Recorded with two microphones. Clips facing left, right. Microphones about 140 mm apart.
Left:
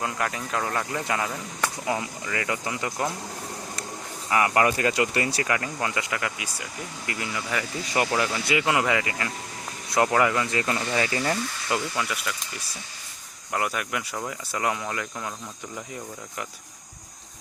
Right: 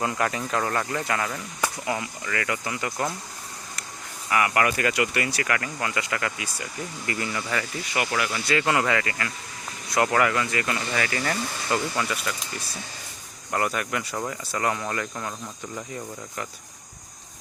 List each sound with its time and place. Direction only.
0.0 s speech: centre (ahead or behind); by 3.1 s 20° left (ahead or behind)
4.3 s speech: 25° left (ahead or behind); by 7.6 s 5° left (ahead or behind)
7.9 s speech: 25° left (ahead or behind)
11.7 s speech: 5° left (ahead or behind)
13.5 s speech: 5° left (ahead or behind)